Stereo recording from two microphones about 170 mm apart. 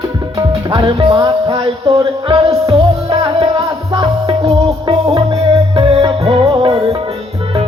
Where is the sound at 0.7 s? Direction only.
30° right (ahead or behind).